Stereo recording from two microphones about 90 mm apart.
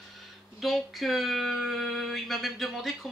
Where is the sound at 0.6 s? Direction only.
Centre (ahead or behind).